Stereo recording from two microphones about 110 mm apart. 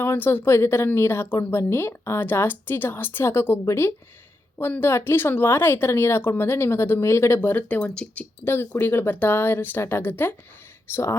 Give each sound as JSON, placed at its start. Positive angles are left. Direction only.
{"t": 0.0, "sound": "speech", "side_deg": 20}